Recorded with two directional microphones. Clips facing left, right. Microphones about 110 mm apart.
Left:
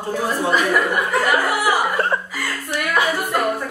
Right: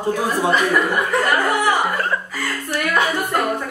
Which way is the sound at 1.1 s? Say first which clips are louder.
Even; 5° left (ahead or behind).